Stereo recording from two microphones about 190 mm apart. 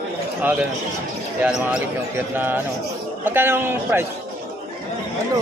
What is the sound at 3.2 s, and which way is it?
Speech, 10° right (ahead or behind).